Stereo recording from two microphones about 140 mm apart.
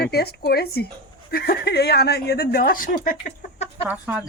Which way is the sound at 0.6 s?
90° left.